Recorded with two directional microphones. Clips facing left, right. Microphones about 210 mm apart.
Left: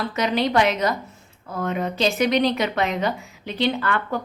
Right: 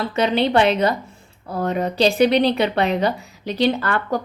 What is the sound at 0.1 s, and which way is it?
A woman's voice, 30° right (ahead or behind).